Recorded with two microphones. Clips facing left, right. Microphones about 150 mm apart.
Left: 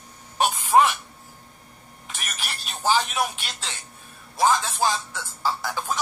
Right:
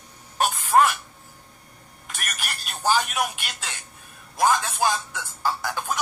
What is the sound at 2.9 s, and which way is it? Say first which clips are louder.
Speech: even; 5° right (ahead or behind).